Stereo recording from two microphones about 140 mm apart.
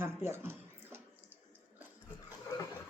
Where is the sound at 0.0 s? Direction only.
15° right (ahead or behind).